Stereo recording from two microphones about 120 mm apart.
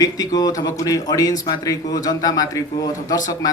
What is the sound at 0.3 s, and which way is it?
Speech, 30° left (ahead or behind).